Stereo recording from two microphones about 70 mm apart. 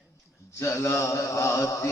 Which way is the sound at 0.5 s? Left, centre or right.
Left.